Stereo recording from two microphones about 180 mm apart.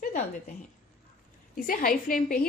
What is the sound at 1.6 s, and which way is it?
Speech, 50° left (ahead or behind).